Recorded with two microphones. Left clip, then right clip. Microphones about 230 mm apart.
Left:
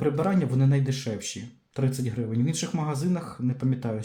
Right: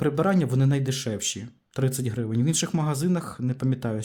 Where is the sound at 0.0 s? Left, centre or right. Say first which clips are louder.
Right 2 dB; right.